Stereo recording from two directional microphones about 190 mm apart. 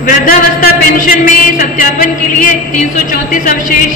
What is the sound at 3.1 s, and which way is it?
Speech, 45° left (ahead or behind).